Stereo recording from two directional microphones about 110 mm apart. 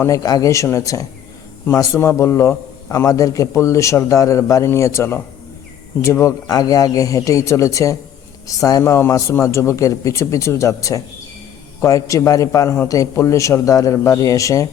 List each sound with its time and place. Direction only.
0.0 s a man's voice: 30° left (ahead or behind)